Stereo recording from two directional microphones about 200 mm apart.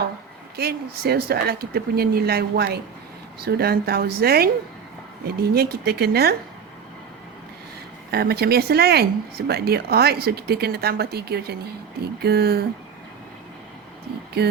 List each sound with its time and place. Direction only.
0.5 s speech: 50° right (ahead or behind)
8.1 s speech: 55° right (ahead or behind)
14.4 s speech: 50° right (ahead or behind)